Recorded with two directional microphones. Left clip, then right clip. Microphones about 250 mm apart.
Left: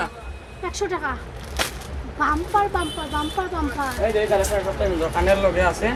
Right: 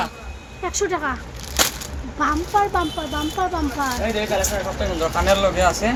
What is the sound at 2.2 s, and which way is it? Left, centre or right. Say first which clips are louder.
Speech: right 1 dB; centre.